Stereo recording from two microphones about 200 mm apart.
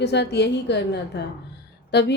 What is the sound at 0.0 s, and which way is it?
A woman's voice, 55° left (ahead or behind).